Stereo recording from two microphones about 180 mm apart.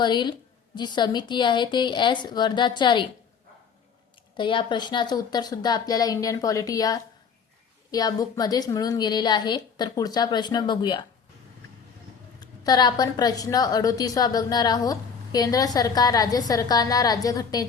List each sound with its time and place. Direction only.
0.0 s a woman's voice: 25° left (ahead or behind)
4.4 s a woman's voice: 25° left (ahead or behind)
12.4 s a woman's voice: 20° left (ahead or behind)